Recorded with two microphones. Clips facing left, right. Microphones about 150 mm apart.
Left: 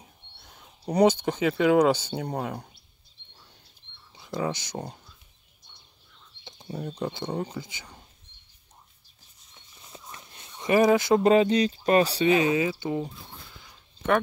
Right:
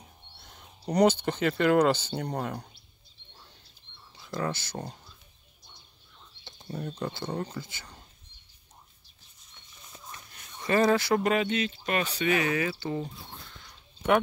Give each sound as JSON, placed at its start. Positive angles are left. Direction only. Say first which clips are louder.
{"t": 0.5, "sound": "speech", "louder": "left 1 dB", "side_deg": 5}
{"t": 4.2, "sound": "speech", "louder": "left 2 dB", "side_deg": 15}
{"t": 6.4, "sound": "speech", "louder": "left 2 dB", "side_deg": 10}
{"t": 9.5, "sound": "a sound", "louder": "left 4 dB", "side_deg": 25}
{"t": 12.3, "sound": "speech", "louder": "left 5 dB", "side_deg": 20}